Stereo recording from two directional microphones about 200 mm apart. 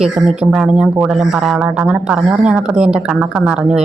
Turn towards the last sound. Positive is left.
turn(degrees=-5)  # may be behind; listen again after turning